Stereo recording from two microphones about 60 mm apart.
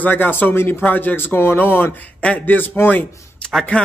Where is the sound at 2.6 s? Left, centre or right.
Left.